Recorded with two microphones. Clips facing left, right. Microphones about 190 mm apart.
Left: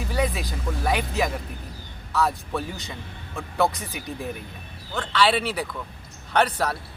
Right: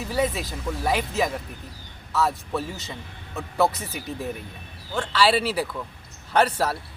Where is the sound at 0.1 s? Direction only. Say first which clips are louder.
Right 2 dB; centre (ahead or behind).